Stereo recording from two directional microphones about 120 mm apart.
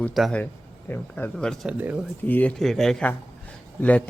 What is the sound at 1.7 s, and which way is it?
Speech, 10° right (ahead or behind).